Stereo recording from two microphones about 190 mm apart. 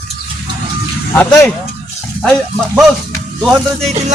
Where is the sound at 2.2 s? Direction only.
Centre (ahead or behind).